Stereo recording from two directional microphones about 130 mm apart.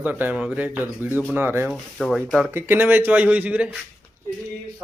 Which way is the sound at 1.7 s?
Centre (ahead or behind).